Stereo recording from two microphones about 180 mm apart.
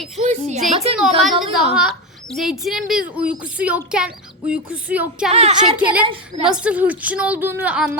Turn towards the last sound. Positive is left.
turn(degrees=-10)  # may be behind; listen again after turning